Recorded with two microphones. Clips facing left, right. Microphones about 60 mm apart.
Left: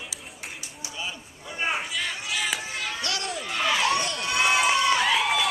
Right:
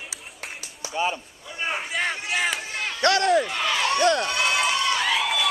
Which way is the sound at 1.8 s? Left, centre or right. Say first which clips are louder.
Right 4 dB; right.